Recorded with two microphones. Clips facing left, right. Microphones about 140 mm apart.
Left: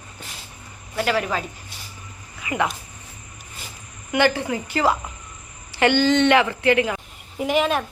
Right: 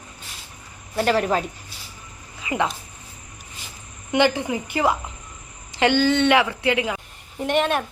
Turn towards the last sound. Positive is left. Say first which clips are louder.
# left 1 dB
turn(degrees=0)  # may be behind; listen again after turning